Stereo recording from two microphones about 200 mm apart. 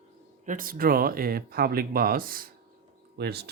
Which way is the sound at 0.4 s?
45° right (ahead or behind).